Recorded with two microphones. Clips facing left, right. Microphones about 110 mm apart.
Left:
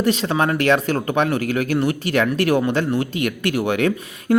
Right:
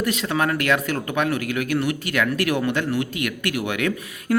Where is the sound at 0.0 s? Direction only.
30° left (ahead or behind).